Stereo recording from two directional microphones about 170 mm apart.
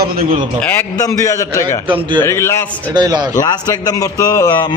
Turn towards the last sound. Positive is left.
turn(degrees=25)  # may be behind; listen again after turning